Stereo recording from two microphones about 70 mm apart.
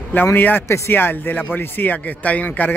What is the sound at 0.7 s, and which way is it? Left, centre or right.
Speech, left.